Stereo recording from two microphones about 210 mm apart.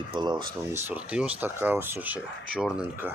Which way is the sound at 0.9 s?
5° right (ahead or behind).